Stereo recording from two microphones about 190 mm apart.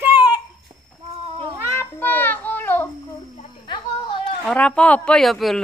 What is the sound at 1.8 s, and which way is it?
Music, 10° left (ahead or behind).